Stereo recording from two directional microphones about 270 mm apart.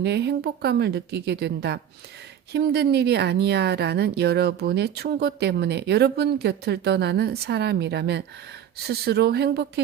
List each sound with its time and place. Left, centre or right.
0.0 s a woman's voice: right